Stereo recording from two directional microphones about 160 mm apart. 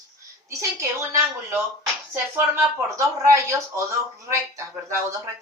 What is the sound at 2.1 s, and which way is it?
Speech, 15° right (ahead or behind).